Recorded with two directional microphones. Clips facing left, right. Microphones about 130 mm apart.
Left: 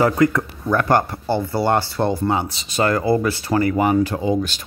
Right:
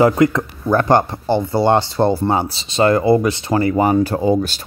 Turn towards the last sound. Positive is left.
turn(degrees=-35)  # may be behind; listen again after turning